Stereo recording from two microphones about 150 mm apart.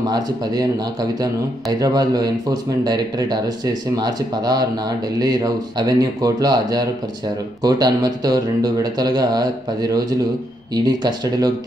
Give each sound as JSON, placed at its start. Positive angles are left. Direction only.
{"t": 0.0, "sound": "speech", "side_deg": -25}